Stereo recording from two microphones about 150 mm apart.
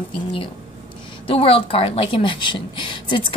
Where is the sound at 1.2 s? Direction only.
40° left (ahead or behind).